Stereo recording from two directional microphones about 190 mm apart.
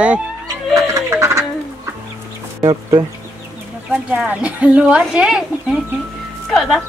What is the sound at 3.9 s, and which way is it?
Speech, 5° right (ahead or behind).